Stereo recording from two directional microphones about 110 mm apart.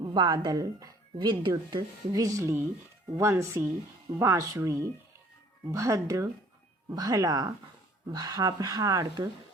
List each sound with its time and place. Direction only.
0.0 s speech: 40° right (ahead or behind)